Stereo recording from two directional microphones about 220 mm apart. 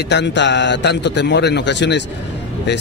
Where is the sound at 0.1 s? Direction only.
50° left (ahead or behind).